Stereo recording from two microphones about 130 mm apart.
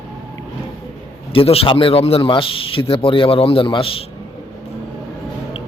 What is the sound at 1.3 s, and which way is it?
A man's voice, 45° left (ahead or behind).